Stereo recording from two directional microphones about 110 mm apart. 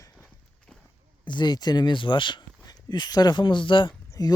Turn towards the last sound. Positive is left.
turn(degrees=35)  # may be behind; listen again after turning